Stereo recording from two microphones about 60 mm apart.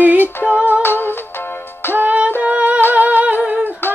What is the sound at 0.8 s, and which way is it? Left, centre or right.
Music, left.